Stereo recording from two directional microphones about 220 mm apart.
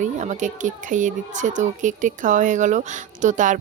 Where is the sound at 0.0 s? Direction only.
35° right (ahead or behind).